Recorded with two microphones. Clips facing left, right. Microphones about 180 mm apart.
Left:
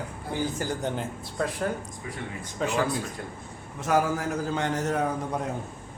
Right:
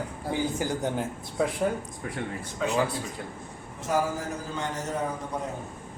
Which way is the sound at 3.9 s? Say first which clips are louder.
Left 3 dB; 70° left (ahead or behind).